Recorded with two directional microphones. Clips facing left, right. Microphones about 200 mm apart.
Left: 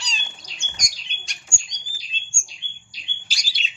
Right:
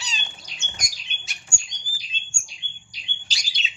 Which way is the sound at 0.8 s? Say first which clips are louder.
Even; 5° right (ahead or behind).